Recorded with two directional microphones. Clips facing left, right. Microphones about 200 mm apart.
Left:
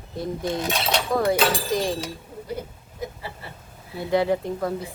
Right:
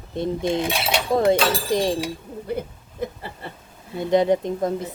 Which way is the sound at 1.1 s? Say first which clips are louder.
Right 3 dB; 25° right (ahead or behind).